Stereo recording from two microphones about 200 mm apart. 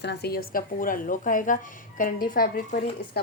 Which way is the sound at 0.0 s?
50° left (ahead or behind).